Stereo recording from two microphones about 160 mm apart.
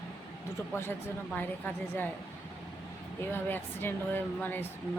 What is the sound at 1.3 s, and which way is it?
Speech, 10° left (ahead or behind).